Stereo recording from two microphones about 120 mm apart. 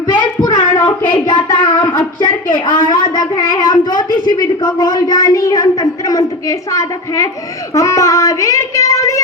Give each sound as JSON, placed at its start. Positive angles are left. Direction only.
{"t": 0.1, "sound": "speech", "side_deg": 35}
{"t": 7.7, "sound": "child singing", "side_deg": 30}